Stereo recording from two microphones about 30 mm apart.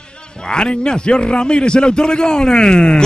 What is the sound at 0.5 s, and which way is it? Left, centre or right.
A man's voice, left.